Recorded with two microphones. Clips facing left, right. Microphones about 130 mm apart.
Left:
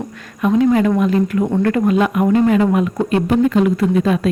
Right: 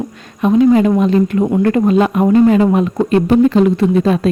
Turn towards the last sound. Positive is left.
turn(degrees=-30)  # may be behind; listen again after turning